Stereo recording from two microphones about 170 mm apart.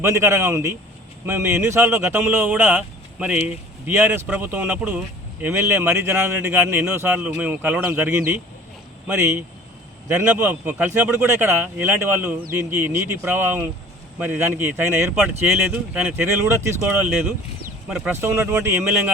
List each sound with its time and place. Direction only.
0.0 s speech: 15° right (ahead or behind)